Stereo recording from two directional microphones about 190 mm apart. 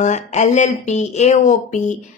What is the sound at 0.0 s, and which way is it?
A woman's voice, 40° left (ahead or behind).